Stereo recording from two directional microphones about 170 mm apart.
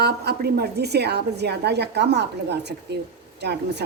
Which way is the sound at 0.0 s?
70° right (ahead or behind).